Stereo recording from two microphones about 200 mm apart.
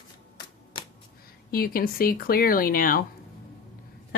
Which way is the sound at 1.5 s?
45° left (ahead or behind).